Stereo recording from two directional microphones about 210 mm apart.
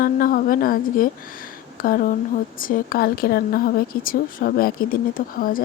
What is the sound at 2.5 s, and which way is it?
Speech, 40° left (ahead or behind).